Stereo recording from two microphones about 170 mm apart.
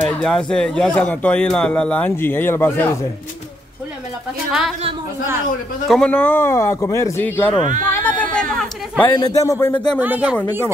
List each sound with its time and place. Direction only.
0.2 s speech: 5° left (ahead or behind)
4.5 s a woman's voice: 5° right (ahead or behind)
5.9 s speech: 5° left (ahead or behind)
7.9 s chatter: 10° left (ahead or behind)
9.1 s a man's voice: 20° left (ahead or behind)
9.9 s speech: 10° right (ahead or behind)